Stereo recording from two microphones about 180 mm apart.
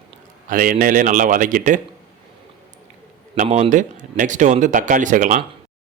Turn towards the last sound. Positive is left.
turn(degrees=-45)  # may be behind; listen again after turning